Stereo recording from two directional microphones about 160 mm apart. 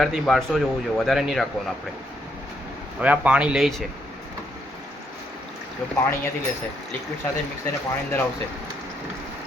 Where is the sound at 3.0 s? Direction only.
10° right (ahead or behind).